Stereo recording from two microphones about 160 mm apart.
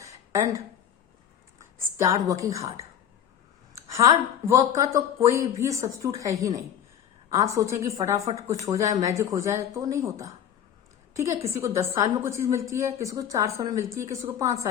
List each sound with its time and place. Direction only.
0.0 s a sound: 20° right (ahead or behind)
2.0 s a woman's voice: 20° right (ahead or behind)
3.8 s a woman's voice: 20° right (ahead or behind)